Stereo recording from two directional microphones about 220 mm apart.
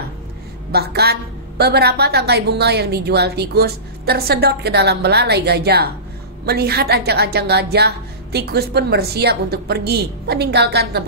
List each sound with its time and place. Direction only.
0.7 s a woman's voice: 45° right (ahead or behind)